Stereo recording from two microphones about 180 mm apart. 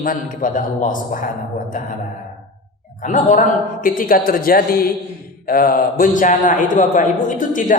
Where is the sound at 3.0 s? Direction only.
45° left (ahead or behind).